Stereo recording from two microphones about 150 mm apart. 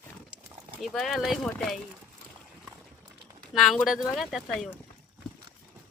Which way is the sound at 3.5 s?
Centre (ahead or behind).